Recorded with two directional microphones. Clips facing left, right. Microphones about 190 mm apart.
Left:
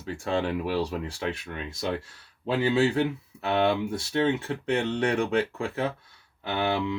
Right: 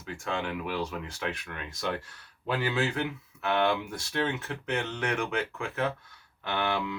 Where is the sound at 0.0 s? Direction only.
35° left (ahead or behind).